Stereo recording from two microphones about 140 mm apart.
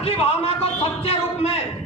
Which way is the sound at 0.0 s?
45° left (ahead or behind).